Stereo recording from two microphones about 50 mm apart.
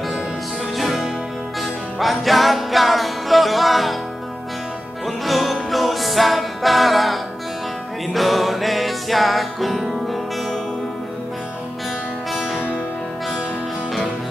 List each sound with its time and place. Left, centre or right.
0.7 s music: centre
5.0 s music: centre
12.3 s music: centre